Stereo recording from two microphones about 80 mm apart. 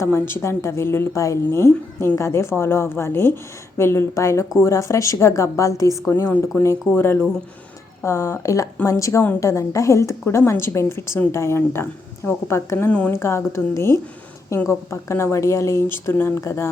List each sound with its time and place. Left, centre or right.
0.0 s a woman's voice: left
8.0 s a woman's voice: left
12.9 s speech: centre
13.1 s a woman's voice: left